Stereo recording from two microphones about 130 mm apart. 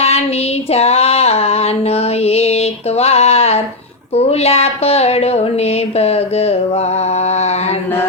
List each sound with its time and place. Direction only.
0.7 s female singing: 55° left (ahead or behind)
4.1 s speech: 50° left (ahead or behind)
7.3 s mantra: 55° left (ahead or behind)